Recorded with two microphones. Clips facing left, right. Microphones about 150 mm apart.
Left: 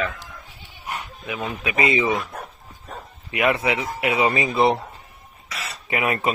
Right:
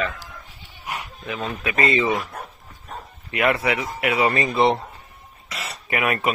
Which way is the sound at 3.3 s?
20° left (ahead or behind).